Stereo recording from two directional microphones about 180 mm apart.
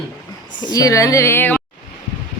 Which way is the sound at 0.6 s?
20° left (ahead or behind).